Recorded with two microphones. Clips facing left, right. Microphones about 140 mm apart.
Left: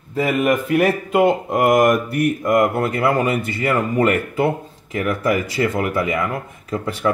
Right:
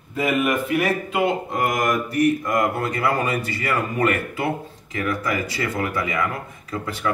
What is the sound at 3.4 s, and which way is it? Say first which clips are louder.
Speech: left 4 dB; 25° left (ahead or behind).